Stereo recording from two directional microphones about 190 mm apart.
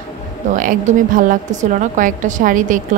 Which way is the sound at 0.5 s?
45° right (ahead or behind).